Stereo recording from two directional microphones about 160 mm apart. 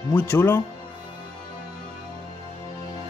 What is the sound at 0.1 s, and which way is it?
Speech, 15° left (ahead or behind).